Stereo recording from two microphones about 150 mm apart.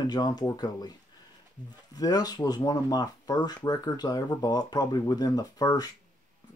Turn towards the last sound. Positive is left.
turn(degrees=25)  # may be behind; listen again after turning